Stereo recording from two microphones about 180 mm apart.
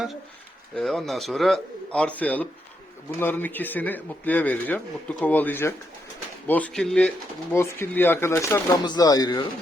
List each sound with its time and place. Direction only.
0.8 s a man's voice: centre (ahead or behind)
7.5 s speech: 15° left (ahead or behind)